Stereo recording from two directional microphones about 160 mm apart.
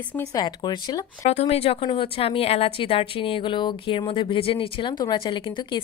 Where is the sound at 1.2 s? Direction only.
45° left (ahead or behind).